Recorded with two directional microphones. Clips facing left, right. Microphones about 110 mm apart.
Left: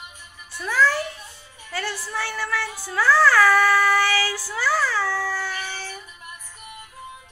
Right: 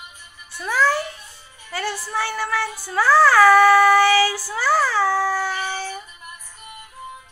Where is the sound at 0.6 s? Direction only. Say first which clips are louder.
Right 1 dB; 15° right (ahead or behind).